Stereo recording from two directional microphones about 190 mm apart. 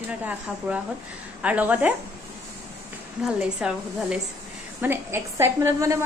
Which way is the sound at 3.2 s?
5° right (ahead or behind).